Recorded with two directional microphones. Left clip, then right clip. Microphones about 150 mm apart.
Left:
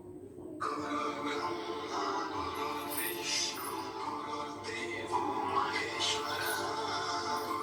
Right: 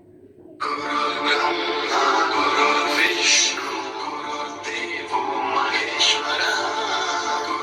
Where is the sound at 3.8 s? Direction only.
55° right (ahead or behind).